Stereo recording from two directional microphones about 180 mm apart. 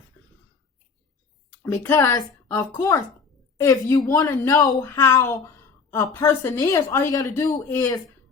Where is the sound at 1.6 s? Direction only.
15° left (ahead or behind).